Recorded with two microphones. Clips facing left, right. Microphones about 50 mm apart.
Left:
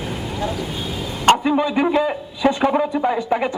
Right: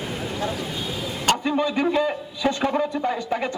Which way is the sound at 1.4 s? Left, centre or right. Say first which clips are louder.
Left 4 dB; centre.